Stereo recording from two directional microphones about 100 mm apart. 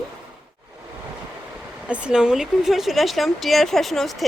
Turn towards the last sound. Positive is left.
turn(degrees=0)  # may be behind; listen again after turning